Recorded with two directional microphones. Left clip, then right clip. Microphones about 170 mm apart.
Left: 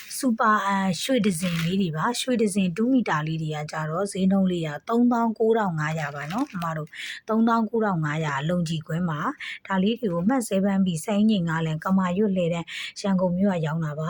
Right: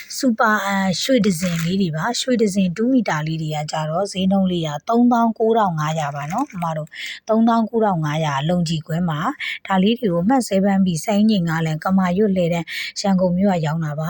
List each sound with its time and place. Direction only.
0.2 s a woman's voice: 20° right (ahead or behind)